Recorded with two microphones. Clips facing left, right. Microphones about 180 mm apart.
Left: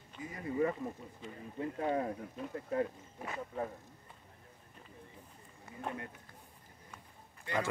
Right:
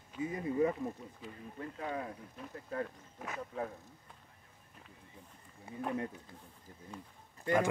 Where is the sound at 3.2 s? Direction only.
Centre (ahead or behind).